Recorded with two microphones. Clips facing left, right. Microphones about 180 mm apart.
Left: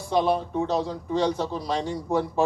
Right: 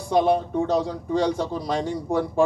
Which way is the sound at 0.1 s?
50° right (ahead or behind).